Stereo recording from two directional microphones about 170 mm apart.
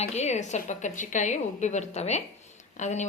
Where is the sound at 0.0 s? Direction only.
40° left (ahead or behind).